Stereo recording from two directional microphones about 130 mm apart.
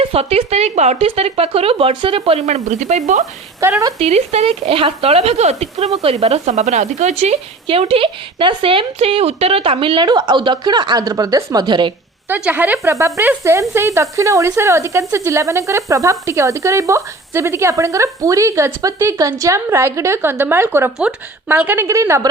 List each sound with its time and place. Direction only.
0.1 s a woman's voice: 50° right (ahead or behind)
2.6 s speech: 70° right (ahead or behind)
3.6 s speech: 20° right (ahead or behind)
4.0 s a woman's voice: 55° right (ahead or behind); by 11.9 s 35° right (ahead or behind)
12.3 s speech: 15° right (ahead or behind)